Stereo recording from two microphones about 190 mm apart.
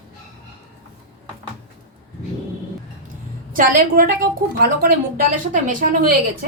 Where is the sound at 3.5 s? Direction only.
45° right (ahead or behind).